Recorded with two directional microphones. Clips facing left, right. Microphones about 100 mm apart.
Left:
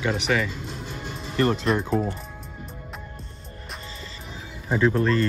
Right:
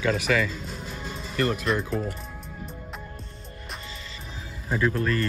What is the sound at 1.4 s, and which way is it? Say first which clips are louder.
Speech: left 3 dB; 30° left (ahead or behind).